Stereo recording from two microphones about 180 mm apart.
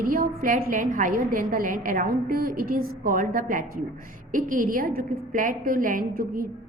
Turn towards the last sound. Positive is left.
turn(degrees=-50)  # may be behind; listen again after turning